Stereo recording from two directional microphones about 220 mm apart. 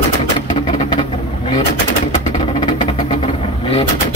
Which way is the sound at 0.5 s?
25° left (ahead or behind).